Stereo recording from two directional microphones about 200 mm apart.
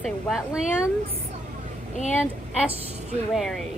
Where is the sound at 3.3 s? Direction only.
Centre (ahead or behind).